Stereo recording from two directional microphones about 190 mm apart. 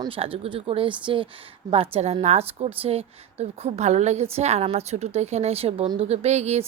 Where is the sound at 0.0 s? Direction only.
30° right (ahead or behind).